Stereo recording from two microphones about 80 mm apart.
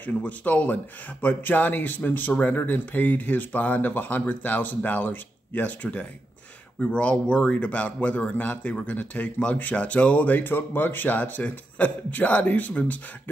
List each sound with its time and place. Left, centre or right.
0.0 s speech: centre